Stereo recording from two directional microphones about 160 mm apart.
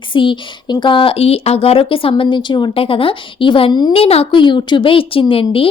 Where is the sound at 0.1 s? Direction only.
30° left (ahead or behind).